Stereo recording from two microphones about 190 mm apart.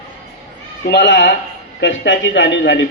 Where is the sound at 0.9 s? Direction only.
65° left (ahead or behind).